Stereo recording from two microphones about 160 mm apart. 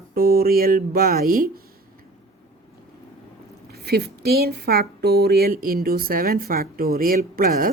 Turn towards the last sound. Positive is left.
turn(degrees=-65)  # may be behind; listen again after turning